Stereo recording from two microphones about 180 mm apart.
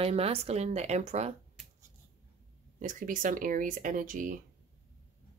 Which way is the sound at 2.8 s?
45° right (ahead or behind).